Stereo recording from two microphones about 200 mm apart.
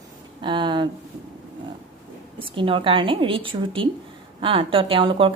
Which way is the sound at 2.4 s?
25° right (ahead or behind).